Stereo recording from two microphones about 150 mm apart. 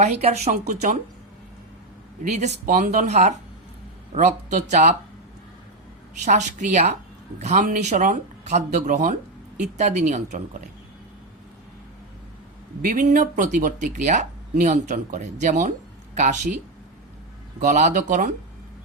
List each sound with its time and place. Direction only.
0.0 s speech: 45° right (ahead or behind)
2.3 s speech: 50° right (ahead or behind)
6.2 s speech: 55° right (ahead or behind)
12.8 s speech: 60° right (ahead or behind)
17.6 s speech: 55° right (ahead or behind)